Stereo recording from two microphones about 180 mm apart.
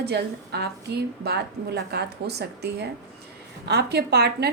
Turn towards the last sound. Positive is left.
turn(degrees=-65)  # may be behind; listen again after turning